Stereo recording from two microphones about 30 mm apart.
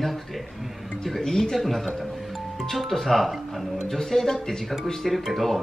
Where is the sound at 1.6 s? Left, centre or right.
Centre.